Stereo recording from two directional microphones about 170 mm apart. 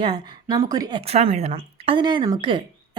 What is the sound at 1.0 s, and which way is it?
A woman's voice, 35° right (ahead or behind).